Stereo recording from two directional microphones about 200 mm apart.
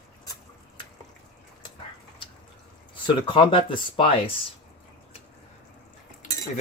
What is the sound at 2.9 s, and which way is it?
Speech, 25° left (ahead or behind).